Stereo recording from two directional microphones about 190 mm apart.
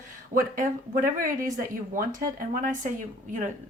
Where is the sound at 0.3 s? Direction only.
45° right (ahead or behind).